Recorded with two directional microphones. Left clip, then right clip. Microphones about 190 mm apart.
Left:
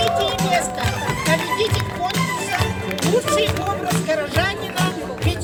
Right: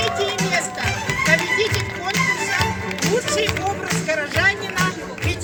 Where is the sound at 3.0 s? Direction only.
25° left (ahead or behind).